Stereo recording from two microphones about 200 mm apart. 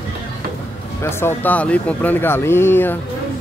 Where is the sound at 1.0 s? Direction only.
10° left (ahead or behind).